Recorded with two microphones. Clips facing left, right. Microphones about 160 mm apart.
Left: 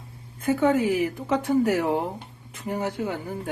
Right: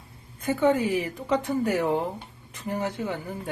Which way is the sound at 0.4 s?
10° left (ahead or behind).